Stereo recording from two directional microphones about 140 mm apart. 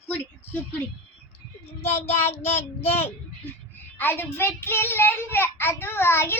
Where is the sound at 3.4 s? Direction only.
10° left (ahead or behind).